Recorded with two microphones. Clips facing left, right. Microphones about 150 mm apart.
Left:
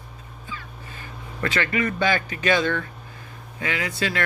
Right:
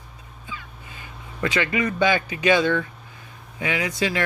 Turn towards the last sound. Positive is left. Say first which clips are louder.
# right 2 dB
turn(degrees=-15)  # may be behind; listen again after turning